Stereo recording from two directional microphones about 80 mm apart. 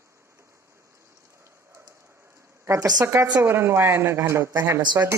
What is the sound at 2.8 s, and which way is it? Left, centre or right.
Speech, right.